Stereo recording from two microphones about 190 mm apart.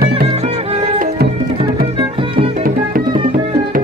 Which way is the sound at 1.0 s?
55° right (ahead or behind).